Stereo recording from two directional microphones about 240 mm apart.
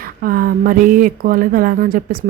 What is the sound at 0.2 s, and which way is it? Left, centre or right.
Speech, right.